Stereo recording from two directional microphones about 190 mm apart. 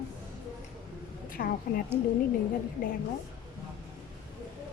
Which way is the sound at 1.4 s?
55° left (ahead or behind).